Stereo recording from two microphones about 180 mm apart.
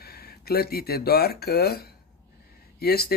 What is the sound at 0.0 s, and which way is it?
Speech, 60° left (ahead or behind).